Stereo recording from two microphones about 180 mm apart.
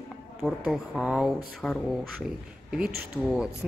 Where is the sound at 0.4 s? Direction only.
Centre (ahead or behind).